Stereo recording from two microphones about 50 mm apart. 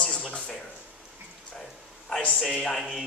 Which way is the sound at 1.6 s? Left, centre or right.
Centre.